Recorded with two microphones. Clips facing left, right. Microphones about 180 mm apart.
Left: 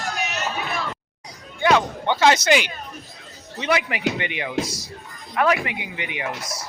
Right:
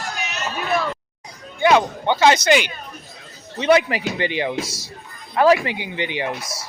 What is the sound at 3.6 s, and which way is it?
Speech, 30° right (ahead or behind).